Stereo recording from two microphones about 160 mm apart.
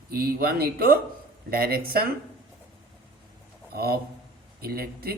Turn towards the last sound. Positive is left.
turn(degrees=-70)  # may be behind; listen again after turning